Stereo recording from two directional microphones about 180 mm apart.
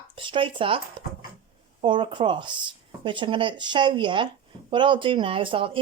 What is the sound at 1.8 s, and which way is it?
Speech, 25° right (ahead or behind).